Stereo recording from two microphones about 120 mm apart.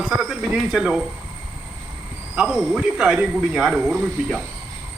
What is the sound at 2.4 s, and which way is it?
Speech, 5° right (ahead or behind).